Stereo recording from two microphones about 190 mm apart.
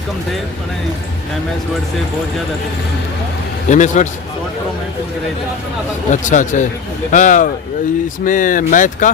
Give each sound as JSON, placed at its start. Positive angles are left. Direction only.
{"t": 3.7, "sound": "speech", "side_deg": 40}
{"t": 6.1, "sound": "speech", "side_deg": 40}